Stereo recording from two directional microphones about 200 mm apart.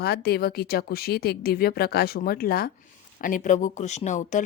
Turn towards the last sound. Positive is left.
turn(degrees=40)  # may be behind; listen again after turning